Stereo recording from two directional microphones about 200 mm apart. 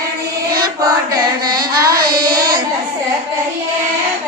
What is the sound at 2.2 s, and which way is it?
Child singing, 20° right (ahead or behind).